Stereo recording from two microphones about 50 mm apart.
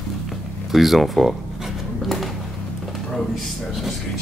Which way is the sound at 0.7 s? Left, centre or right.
Centre.